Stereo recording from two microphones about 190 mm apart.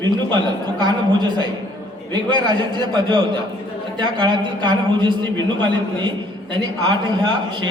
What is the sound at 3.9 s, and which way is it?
A man's voice, 25° right (ahead or behind).